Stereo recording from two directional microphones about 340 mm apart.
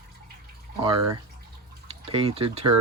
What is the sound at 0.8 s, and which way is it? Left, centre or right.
Speech, centre.